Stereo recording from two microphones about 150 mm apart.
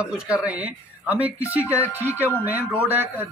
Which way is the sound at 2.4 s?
10° right (ahead or behind).